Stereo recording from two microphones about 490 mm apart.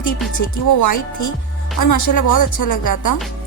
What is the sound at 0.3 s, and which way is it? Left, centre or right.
Speech, left.